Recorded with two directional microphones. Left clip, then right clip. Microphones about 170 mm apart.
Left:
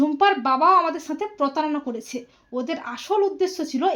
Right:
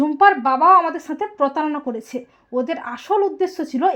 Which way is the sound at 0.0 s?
40° right (ahead or behind).